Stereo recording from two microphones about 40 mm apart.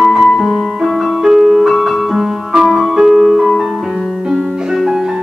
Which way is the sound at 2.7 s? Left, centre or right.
Centre.